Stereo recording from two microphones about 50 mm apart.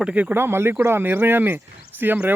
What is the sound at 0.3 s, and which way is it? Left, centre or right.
Speech, right.